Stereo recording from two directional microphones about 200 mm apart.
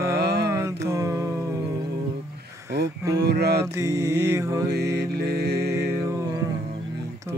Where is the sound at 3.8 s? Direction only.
15° right (ahead or behind).